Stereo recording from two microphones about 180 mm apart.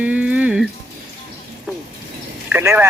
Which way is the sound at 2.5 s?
10° right (ahead or behind).